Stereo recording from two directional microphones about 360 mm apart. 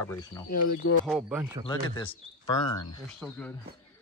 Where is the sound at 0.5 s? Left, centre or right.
Left.